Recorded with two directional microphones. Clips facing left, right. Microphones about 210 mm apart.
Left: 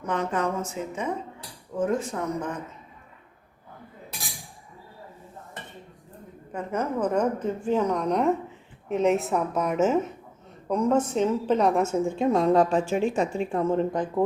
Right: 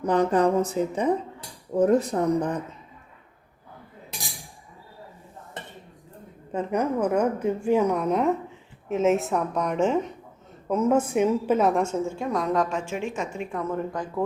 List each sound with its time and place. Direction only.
0.0 s speech: 35° right (ahead or behind)
6.5 s a woman's voice: 20° right (ahead or behind); by 11.9 s 5° left (ahead or behind)
12.0 s a woman's voice: 20° left (ahead or behind)